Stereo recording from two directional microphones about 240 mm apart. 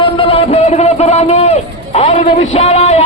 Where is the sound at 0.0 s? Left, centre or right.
Left.